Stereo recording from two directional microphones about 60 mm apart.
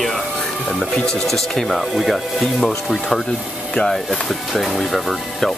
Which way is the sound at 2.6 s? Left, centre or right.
Centre.